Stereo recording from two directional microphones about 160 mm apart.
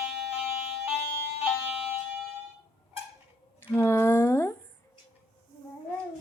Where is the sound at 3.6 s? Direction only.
15° left (ahead or behind).